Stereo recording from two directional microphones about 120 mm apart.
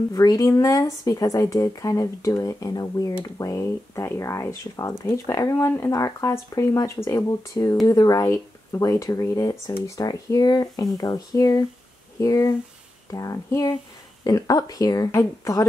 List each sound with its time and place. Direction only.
0.1 s speech: 30° left (ahead or behind)